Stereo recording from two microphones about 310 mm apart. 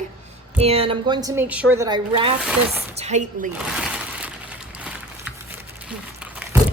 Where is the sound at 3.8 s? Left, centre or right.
Centre.